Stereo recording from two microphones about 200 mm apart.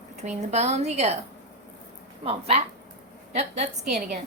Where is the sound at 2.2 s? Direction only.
30° right (ahead or behind).